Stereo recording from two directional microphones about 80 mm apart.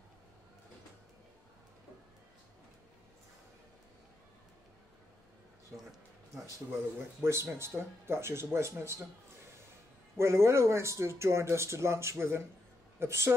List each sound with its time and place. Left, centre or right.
7.2 s speech: right
10.1 s speech: right